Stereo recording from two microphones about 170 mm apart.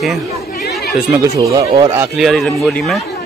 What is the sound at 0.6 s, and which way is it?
Chatter, 70° left (ahead or behind).